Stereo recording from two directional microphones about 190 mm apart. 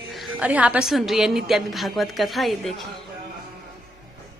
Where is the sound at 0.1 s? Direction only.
5° right (ahead or behind).